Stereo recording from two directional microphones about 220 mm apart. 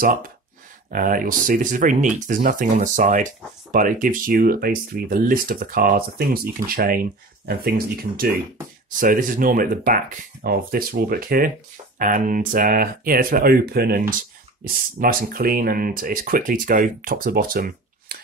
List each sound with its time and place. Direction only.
0.0 s speech: 40° right (ahead or behind)